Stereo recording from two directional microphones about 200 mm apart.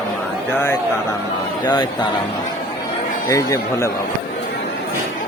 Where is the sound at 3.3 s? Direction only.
15° left (ahead or behind).